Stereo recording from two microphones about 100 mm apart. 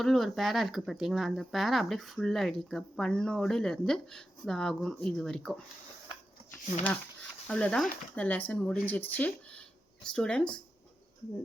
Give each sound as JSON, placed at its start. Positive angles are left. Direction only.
{"t": 0.0, "sound": "speech", "side_deg": 0}
{"t": 6.5, "sound": "speech", "side_deg": 15}